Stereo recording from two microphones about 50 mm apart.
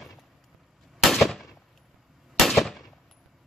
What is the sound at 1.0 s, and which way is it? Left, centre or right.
Firecracker, centre.